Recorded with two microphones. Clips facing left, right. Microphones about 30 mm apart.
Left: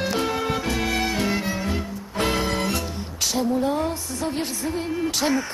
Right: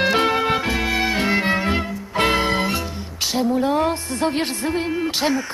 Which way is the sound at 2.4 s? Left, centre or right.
Right.